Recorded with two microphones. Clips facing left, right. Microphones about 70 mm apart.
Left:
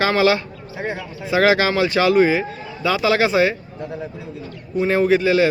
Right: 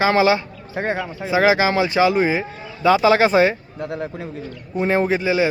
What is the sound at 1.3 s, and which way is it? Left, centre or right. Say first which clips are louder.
Speech: even; centre.